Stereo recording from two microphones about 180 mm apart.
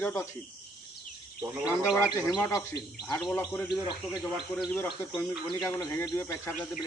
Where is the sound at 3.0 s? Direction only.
5° left (ahead or behind).